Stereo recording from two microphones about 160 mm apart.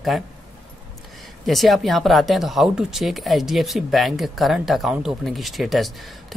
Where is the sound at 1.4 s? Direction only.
Centre (ahead or behind).